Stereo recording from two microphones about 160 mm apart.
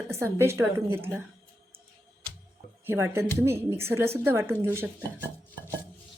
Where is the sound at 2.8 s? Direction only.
15° right (ahead or behind).